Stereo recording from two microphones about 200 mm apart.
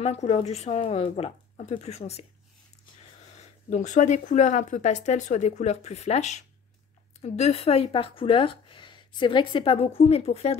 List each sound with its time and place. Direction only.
0.0 s speech: 30° left (ahead or behind)
3.3 s speech: 35° left (ahead or behind)